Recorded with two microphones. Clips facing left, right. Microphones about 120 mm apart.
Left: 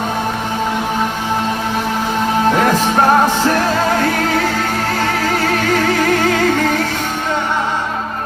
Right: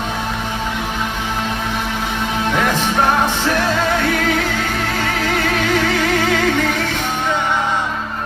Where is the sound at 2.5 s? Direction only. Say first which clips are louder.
Left 3 dB; 40° left (ahead or behind).